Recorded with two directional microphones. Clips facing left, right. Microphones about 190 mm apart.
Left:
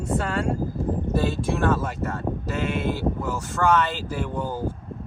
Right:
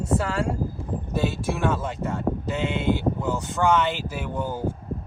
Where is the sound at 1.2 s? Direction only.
10° right (ahead or behind).